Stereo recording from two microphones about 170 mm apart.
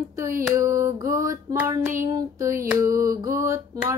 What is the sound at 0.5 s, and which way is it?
Hands, 20° right (ahead or behind).